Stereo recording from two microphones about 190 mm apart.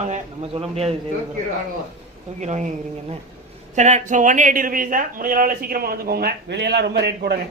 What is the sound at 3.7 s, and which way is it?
A man's voice, 40° right (ahead or behind).